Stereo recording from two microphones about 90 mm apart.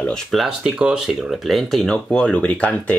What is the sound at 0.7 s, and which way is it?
Speech, 10° right (ahead or behind).